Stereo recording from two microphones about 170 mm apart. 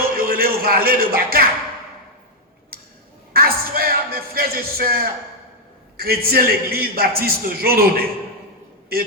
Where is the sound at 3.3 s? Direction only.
60° right (ahead or behind).